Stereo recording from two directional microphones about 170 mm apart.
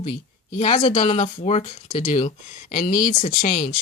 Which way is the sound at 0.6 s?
45° left (ahead or behind).